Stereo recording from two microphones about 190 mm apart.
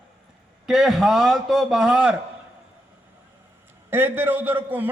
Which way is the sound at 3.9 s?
10° right (ahead or behind).